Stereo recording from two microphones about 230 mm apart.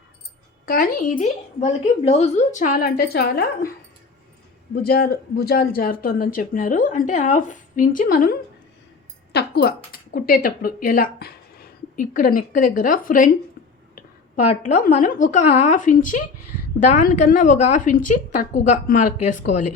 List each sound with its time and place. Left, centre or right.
0.6 s speech: left
4.7 s speech: left
14.6 s speech: left